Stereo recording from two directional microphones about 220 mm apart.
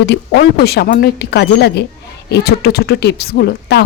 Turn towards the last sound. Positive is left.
turn(degrees=50)  # may be behind; listen again after turning